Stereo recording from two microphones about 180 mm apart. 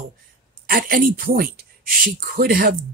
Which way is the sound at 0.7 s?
55° right (ahead or behind).